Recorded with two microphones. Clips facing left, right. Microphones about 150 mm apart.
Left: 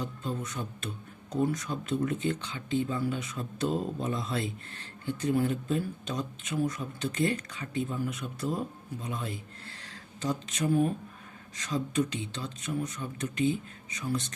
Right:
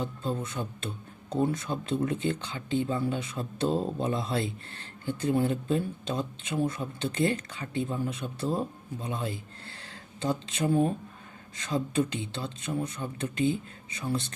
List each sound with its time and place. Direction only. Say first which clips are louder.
0.0 s speech: right 3 dB; 30° right (ahead or behind)